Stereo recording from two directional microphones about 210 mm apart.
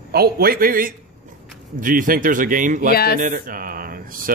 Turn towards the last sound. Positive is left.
turn(degrees=-45)  # may be behind; listen again after turning